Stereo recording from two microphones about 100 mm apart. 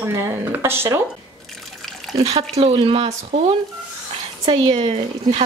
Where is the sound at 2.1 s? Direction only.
90° right.